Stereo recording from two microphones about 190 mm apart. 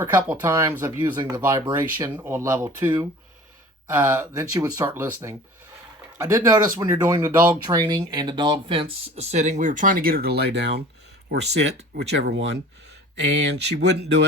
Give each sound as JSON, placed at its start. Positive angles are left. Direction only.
{"t": 0.0, "sound": "speech", "side_deg": -15}
{"t": 13.6, "sound": "speech", "side_deg": -65}